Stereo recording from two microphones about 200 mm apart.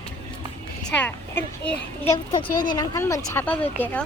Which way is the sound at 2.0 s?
20° left (ahead or behind).